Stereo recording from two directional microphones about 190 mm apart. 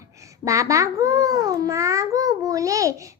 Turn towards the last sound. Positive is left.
turn(degrees=-15)  # may be behind; listen again after turning